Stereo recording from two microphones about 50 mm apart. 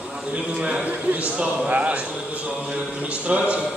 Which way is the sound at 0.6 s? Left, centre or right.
Right.